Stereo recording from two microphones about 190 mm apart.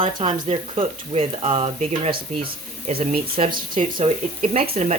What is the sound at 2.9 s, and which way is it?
Speech, 50° right (ahead or behind).